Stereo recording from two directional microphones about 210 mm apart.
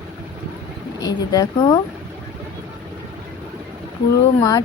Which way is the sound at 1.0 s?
20° left (ahead or behind).